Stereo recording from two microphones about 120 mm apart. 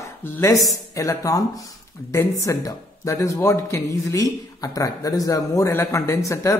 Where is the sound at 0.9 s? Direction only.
30° left (ahead or behind).